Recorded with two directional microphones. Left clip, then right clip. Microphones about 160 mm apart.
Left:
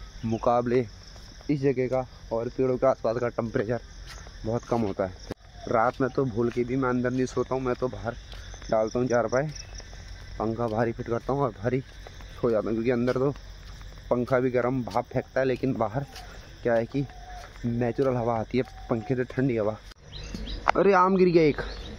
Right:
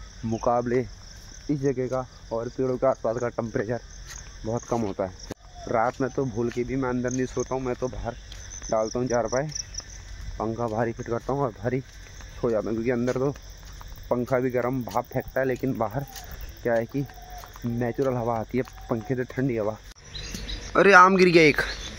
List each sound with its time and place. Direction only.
0.4 s speech: 5° left (ahead or behind)
2.9 s speech: centre (ahead or behind)